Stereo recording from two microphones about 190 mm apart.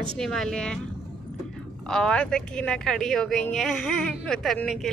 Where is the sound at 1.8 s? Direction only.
5° left (ahead or behind).